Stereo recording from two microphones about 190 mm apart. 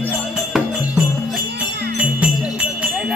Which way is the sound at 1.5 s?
60° right (ahead or behind).